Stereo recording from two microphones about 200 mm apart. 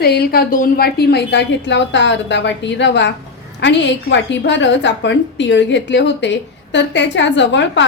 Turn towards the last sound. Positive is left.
turn(degrees=65)  # may be behind; listen again after turning